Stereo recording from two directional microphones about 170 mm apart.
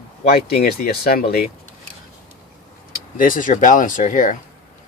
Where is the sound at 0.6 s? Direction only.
65° left (ahead or behind).